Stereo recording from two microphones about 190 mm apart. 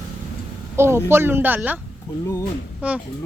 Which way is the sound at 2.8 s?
5° right (ahead or behind).